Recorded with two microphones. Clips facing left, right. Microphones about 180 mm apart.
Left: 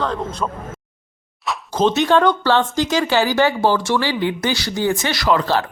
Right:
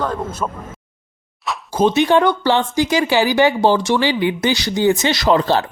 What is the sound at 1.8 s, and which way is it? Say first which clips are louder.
Speech: right 1 dB; 10° right (ahead or behind).